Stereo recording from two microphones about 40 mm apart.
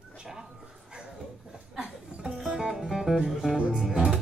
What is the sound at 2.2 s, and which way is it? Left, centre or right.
Music, centre.